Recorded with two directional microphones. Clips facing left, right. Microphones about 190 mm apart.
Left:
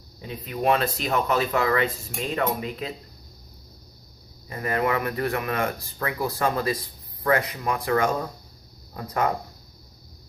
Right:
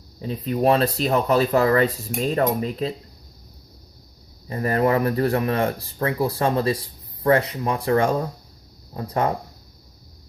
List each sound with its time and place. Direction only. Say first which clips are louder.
0.2 s speech: right 6 dB; 35° right (ahead or behind)
4.4 s speech: right 5 dB; 35° right (ahead or behind)